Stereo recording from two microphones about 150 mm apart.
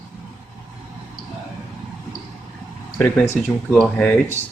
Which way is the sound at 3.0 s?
10° left (ahead or behind).